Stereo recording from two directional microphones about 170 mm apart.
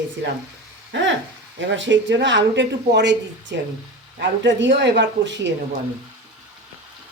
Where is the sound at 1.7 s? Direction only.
90° right.